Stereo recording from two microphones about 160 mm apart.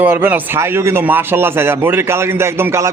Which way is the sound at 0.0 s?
10° right (ahead or behind).